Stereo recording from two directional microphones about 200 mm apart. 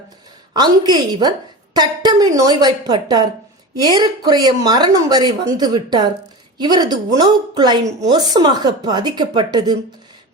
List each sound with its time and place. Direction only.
0.5 s a woman's voice: 20° right (ahead or behind)